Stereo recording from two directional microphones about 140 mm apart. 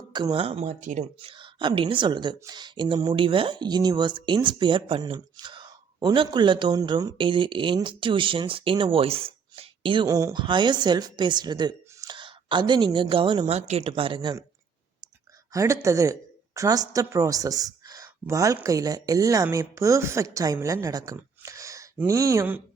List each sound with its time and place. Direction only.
0.1 s speech: 30° right (ahead or behind)
0.4 s speech: 45° right (ahead or behind)
0.7 s speech: 65° right (ahead or behind)
1.2 s a woman's voice: 40° right (ahead or behind)
13.5 s speech: 50° right (ahead or behind)
13.8 s speech: 40° right (ahead or behind)
15.5 s speech: 20° right (ahead or behind)